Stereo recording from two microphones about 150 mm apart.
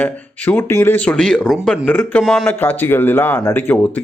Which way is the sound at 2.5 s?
15° left (ahead or behind).